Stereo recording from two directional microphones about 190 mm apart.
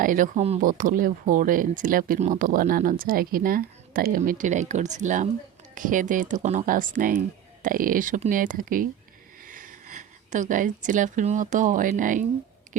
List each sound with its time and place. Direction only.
0.0 s speech: 45° right (ahead or behind)